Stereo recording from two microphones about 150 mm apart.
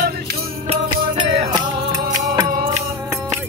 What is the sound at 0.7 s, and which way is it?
Music, 35° right (ahead or behind).